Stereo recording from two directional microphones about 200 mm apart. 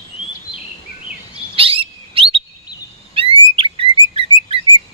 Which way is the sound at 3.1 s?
25° right (ahead or behind).